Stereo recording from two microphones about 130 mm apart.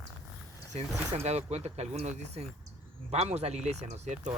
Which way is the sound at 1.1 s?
55° right (ahead or behind).